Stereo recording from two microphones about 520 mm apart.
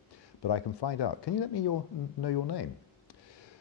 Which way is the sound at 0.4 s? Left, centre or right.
Left.